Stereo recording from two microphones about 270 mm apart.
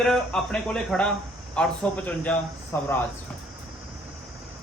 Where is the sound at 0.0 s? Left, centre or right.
Centre.